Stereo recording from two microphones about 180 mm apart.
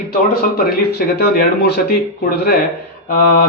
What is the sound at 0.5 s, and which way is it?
Speech, 60° left (ahead or behind).